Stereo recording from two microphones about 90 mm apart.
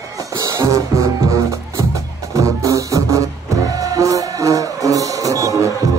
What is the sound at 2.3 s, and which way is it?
Music, 35° right (ahead or behind).